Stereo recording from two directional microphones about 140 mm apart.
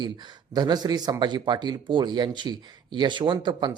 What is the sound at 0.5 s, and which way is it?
Speech, 30° right (ahead or behind).